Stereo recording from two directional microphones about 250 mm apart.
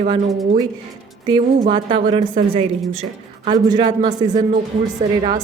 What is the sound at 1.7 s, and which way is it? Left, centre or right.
Speech, centre.